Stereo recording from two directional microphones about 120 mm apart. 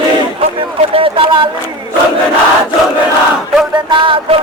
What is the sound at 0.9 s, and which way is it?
Music, 45° right (ahead or behind).